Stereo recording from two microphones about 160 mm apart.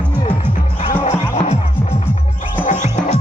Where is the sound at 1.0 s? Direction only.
40° left (ahead or behind).